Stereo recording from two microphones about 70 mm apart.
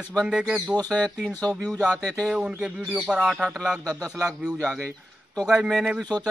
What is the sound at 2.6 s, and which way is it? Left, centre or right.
Speech, centre.